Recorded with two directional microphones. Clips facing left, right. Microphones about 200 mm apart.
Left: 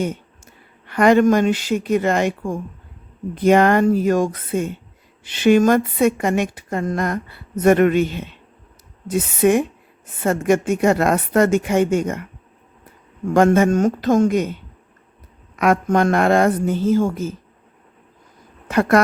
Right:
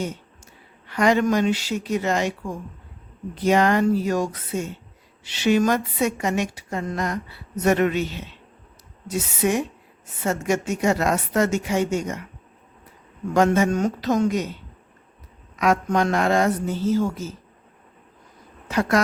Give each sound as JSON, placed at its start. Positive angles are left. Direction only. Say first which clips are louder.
{"t": 0.9, "sound": "a woman's voice", "louder": "left 6 dB", "side_deg": 55}
{"t": 13.3, "sound": "a woman's voice", "louder": "left 5 dB", "side_deg": 55}
{"t": 15.5, "sound": "speech", "louder": "left 4 dB", "side_deg": 55}
{"t": 18.7, "sound": "speech", "louder": "left 5 dB", "side_deg": 55}